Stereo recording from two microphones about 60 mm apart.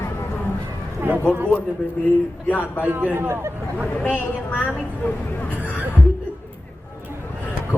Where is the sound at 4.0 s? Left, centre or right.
Left.